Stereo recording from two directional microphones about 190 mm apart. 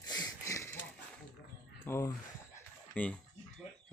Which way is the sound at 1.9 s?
15° left (ahead or behind).